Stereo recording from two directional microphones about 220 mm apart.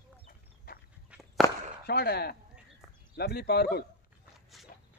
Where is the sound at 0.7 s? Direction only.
45° left (ahead or behind).